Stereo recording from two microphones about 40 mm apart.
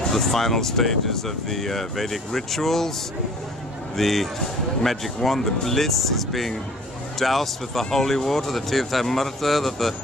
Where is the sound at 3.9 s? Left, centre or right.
Centre.